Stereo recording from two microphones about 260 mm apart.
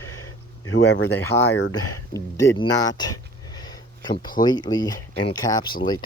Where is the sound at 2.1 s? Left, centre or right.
Centre.